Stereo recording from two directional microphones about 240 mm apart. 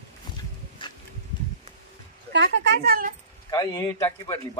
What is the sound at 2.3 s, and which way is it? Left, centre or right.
Speech, right.